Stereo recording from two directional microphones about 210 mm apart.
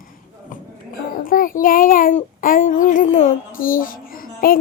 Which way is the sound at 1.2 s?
40° left (ahead or behind).